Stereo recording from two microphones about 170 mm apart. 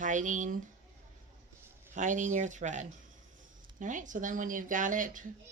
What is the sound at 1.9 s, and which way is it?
Speech, 45° right (ahead or behind).